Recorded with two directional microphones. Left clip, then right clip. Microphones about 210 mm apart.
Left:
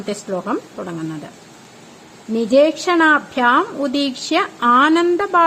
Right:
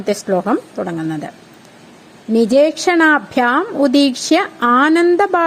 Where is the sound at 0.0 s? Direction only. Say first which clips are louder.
Right 7 dB; 25° right (ahead or behind).